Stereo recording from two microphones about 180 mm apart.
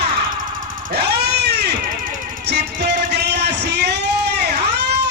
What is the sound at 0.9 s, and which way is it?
Baby cry, 65° right (ahead or behind).